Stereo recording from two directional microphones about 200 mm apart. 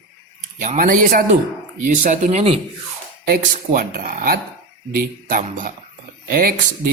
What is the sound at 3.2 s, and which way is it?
Speech, 50° right (ahead or behind).